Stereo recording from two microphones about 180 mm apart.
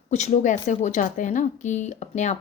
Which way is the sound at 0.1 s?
40° left (ahead or behind).